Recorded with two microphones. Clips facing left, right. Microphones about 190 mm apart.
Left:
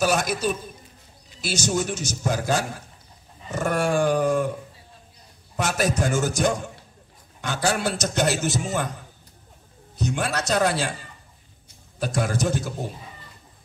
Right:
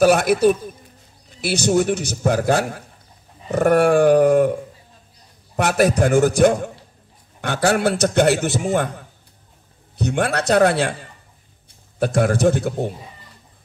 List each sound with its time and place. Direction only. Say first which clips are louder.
0.0 s a man's voice: right 9 dB; 60° right (ahead or behind)
5.6 s a man's voice: right 7 dB; 60° right (ahead or behind)